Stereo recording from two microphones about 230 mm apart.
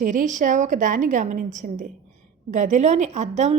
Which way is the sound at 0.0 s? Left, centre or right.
Right.